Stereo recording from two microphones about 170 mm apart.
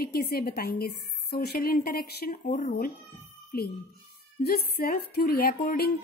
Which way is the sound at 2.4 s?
50° left (ahead or behind).